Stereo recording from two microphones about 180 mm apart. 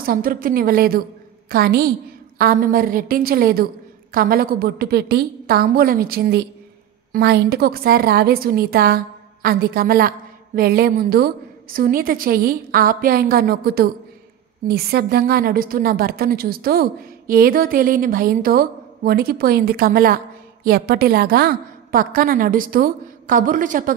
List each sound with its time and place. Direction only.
0.0 s a woman's voice: 55° right (ahead or behind)